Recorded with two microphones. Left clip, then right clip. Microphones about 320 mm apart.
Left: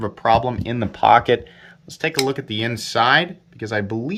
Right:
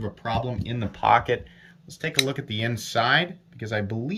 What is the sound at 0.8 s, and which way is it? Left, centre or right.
Speech, centre.